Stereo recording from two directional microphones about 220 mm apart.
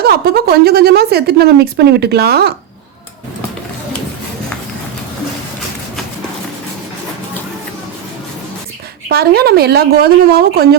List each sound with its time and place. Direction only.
0.0 s a woman's voice: 45° right (ahead or behind)
9.0 s a woman's voice: 45° right (ahead or behind)